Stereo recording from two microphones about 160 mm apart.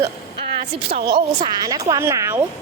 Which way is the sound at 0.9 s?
75° right (ahead or behind).